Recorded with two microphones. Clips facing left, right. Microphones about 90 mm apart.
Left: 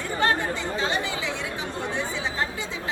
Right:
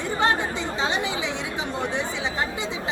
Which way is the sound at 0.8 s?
20° right (ahead or behind).